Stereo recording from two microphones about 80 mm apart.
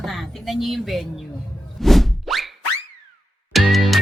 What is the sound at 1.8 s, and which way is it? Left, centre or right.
Plop, centre.